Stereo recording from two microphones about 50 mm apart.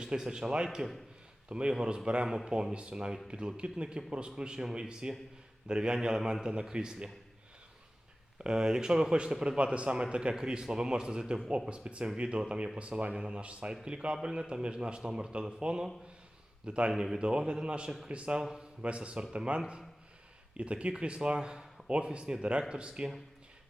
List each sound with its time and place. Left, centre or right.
0.0 s a man's voice: centre
2.2 s a man's voice: centre
8.4 s a man's voice: centre